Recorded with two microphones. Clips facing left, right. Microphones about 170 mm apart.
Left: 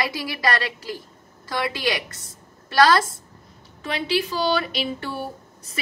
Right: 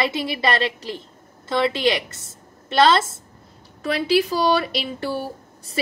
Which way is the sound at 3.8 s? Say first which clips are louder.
Right 5 dB; 40° right (ahead or behind).